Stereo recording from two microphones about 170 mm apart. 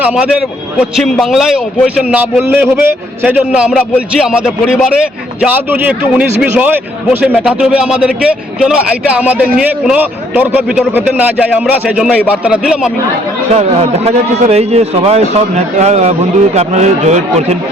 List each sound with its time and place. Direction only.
0.0 s a man's voice: 5° right (ahead or behind)
2.4 s a man's voice: 15° right (ahead or behind)
13.5 s a man's voice: 40° right (ahead or behind)